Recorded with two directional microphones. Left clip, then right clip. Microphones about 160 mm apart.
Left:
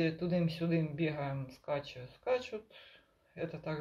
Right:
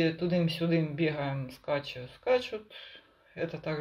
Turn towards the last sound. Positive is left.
turn(degrees=-15)  # may be behind; listen again after turning